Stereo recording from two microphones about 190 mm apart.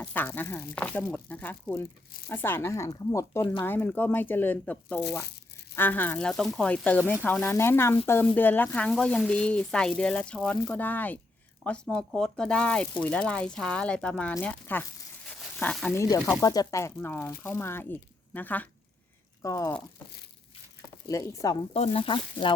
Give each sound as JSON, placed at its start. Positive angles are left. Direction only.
{"t": 0.0, "sound": "speech", "side_deg": 10}
{"t": 3.7, "sound": "speech", "side_deg": 10}
{"t": 15.3, "sound": "a sound", "side_deg": 10}
{"t": 16.0, "sound": "speech", "side_deg": 15}
{"t": 21.1, "sound": "speech", "side_deg": 15}
{"t": 21.7, "sound": "speech", "side_deg": 30}